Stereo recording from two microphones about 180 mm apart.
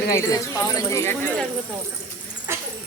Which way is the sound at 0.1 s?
20° left (ahead or behind).